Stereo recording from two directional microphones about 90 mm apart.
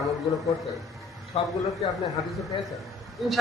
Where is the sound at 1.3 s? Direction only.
90° left.